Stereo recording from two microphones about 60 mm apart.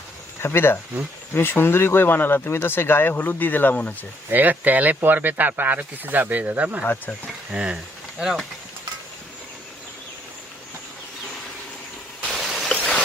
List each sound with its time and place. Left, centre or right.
0.4 s speech: left
4.3 s speech: right
6.8 s speech: left
7.5 s speech: centre
8.2 s speech: centre
12.2 s a sound: centre